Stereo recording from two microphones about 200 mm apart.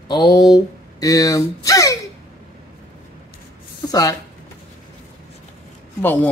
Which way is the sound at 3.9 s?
20° left (ahead or behind).